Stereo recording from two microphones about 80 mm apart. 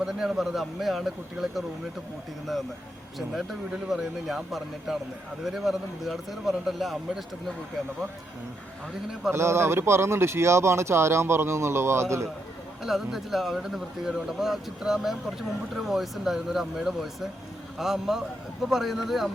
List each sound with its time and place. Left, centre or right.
0.0 s speech: centre
3.8 s speech: centre
9.3 s speech: right
12.8 s speech: centre